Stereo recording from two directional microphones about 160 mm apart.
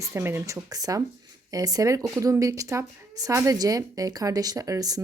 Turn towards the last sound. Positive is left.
turn(degrees=-25)  # may be behind; listen again after turning